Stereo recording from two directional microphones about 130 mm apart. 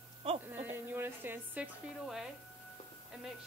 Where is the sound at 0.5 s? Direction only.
15° right (ahead or behind).